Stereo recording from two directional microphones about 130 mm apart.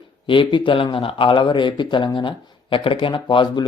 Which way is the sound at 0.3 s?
40° left (ahead or behind).